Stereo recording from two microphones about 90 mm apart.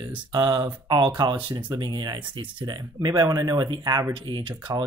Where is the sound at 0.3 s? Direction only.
50° right (ahead or behind).